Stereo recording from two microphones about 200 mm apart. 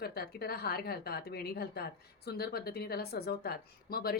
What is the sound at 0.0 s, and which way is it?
A woman's voice, 50° left (ahead or behind).